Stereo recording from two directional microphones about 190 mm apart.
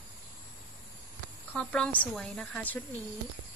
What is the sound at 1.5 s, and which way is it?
A woman's voice, 5° left (ahead or behind).